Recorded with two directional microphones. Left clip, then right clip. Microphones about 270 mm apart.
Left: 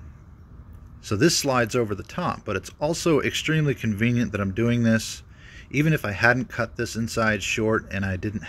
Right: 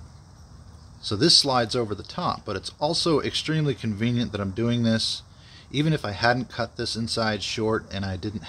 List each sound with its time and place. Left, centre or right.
1.0 s speech: centre